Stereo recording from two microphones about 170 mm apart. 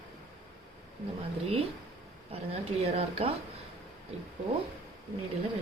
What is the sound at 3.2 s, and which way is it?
Speech, 35° right (ahead or behind).